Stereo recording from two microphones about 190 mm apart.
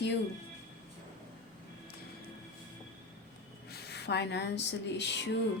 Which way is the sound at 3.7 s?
60° left (ahead or behind).